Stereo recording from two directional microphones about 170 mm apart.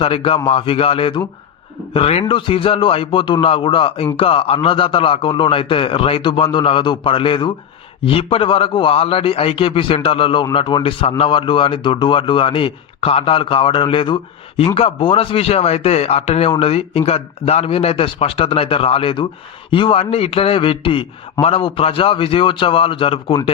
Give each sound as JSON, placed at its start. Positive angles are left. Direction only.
{"t": 0.0, "sound": "a man's voice", "side_deg": 35}